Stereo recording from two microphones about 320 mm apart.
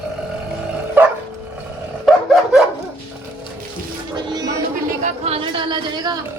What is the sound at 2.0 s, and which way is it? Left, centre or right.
Dog, centre.